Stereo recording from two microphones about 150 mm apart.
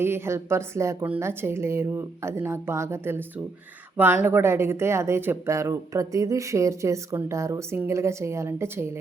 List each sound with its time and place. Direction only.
0.0 s a woman's voice: 15° right (ahead or behind)